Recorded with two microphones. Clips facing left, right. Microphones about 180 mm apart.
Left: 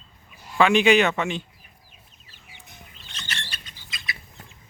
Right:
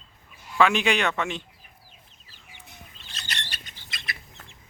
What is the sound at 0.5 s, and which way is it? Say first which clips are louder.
Speech: left 5 dB; centre (ahead or behind).